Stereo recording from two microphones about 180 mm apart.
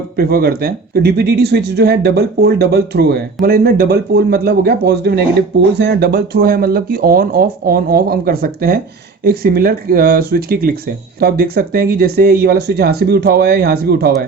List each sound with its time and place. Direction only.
0.2 s speech: 60° right (ahead or behind)